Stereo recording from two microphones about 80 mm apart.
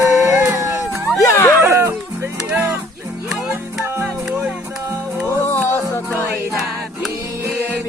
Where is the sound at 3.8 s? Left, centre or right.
Right.